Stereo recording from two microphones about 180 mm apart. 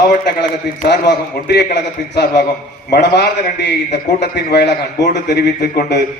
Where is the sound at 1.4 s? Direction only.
65° left (ahead or behind).